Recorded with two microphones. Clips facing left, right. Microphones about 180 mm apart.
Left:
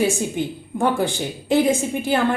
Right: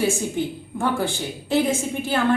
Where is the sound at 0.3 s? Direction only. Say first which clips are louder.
Left 2 dB; 15° left (ahead or behind).